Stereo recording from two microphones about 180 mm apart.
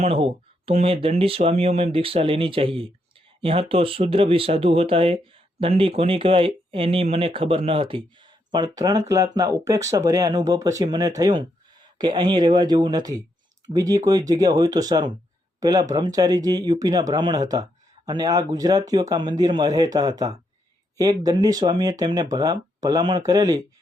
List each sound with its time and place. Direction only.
0.0 s speech: 30° right (ahead or behind)